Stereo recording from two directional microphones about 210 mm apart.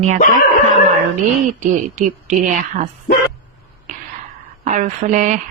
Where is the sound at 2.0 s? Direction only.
35° right (ahead or behind).